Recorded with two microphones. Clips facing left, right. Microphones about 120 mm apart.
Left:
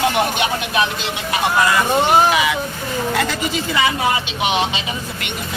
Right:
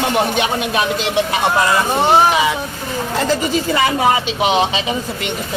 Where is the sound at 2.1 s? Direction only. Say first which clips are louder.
Right 4 dB; 25° right (ahead or behind).